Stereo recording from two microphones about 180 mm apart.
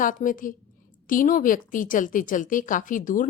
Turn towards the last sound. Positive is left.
turn(degrees=50)  # may be behind; listen again after turning